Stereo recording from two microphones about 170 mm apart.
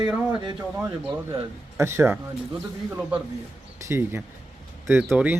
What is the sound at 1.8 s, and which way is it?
Speech, 15° right (ahead or behind).